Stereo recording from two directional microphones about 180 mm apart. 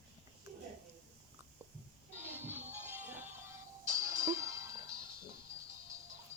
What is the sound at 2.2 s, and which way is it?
Music, 10° right (ahead or behind).